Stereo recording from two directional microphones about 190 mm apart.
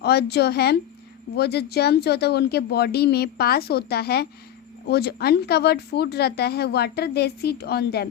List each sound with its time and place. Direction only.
0.0 s speech: 60° left (ahead or behind)